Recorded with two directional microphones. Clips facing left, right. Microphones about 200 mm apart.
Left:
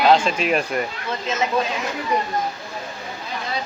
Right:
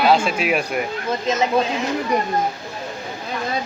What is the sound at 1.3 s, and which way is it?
Speech, 35° right (ahead or behind).